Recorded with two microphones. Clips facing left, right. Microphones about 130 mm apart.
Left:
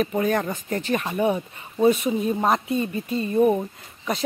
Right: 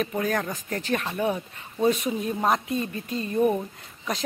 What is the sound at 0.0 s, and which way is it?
Speech, 5° left (ahead or behind).